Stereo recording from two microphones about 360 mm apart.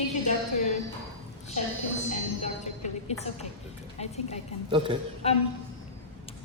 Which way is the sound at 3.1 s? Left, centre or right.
Centre.